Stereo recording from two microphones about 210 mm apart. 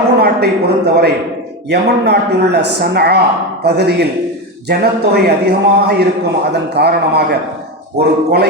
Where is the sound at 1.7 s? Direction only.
50° right (ahead or behind).